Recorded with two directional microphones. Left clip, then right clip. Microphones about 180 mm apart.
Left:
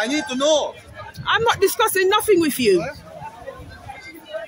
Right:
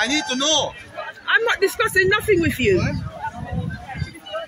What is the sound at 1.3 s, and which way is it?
Speech, 20° left (ahead or behind).